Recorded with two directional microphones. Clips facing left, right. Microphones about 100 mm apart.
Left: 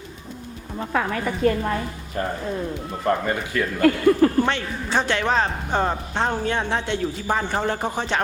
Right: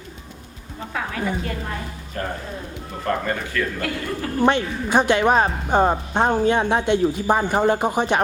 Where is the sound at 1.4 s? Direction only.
45° left (ahead or behind).